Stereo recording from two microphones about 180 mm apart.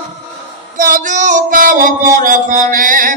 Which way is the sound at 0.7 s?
50° right (ahead or behind).